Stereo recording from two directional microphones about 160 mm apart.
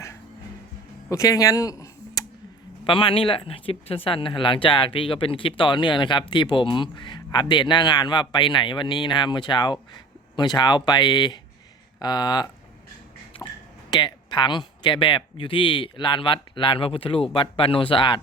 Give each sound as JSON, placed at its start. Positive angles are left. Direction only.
{"t": 1.1, "sound": "speech", "side_deg": 20}
{"t": 2.8, "sound": "speech", "side_deg": 30}
{"t": 13.9, "sound": "speech", "side_deg": 30}